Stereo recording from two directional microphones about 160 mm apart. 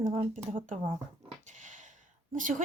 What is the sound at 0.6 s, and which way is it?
Speech, 55° right (ahead or behind).